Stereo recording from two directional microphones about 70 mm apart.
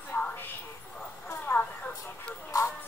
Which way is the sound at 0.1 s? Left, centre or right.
Left.